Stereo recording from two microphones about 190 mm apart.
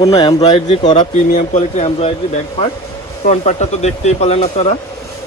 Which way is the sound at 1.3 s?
40° left (ahead or behind).